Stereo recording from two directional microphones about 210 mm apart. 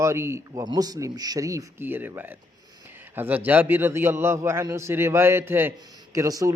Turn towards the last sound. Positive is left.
turn(degrees=-15)  # may be behind; listen again after turning